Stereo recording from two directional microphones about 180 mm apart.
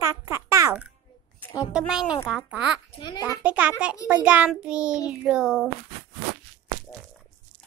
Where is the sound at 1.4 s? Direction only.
20° left (ahead or behind).